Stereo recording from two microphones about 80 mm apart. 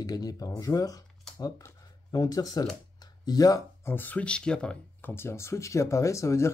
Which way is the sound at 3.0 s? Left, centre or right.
Left.